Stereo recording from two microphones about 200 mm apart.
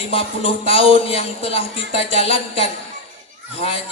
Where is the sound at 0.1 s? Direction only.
30° left (ahead or behind).